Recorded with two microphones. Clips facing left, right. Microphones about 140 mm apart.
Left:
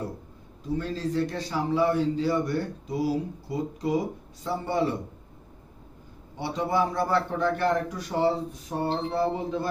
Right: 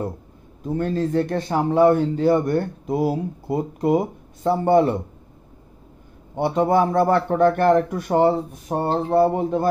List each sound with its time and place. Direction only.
0.7 s speech: 55° right (ahead or behind)
6.3 s a man's voice: 55° right (ahead or behind)